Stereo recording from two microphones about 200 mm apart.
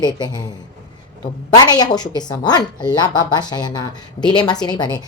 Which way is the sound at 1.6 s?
20° left (ahead or behind).